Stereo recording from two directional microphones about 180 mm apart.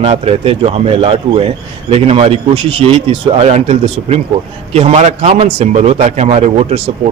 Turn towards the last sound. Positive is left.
turn(degrees=-35)  # may be behind; listen again after turning